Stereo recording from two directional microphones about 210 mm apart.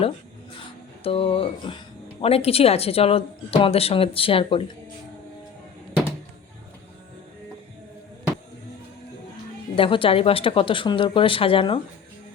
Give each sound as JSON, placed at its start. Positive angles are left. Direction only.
{"t": 1.0, "sound": "speech", "side_deg": 25}
{"t": 9.7, "sound": "speech", "side_deg": 25}